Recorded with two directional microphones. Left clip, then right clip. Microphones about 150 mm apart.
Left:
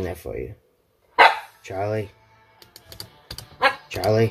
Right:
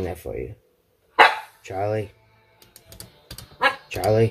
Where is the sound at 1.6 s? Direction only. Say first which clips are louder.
Right 1 dB; 10° right (ahead or behind).